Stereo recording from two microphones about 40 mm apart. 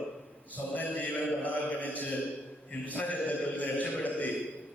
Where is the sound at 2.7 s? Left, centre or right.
Left.